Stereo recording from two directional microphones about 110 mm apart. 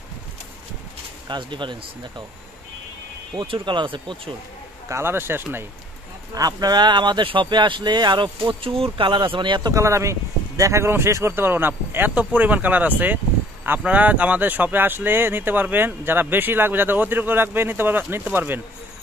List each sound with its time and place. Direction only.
1.3 s speech: 45° right (ahead or behind)
3.3 s speech: 50° right (ahead or behind)
4.8 s speech: 25° right (ahead or behind)
6.3 s speech: 35° right (ahead or behind); by 18.6 s 15° right (ahead or behind)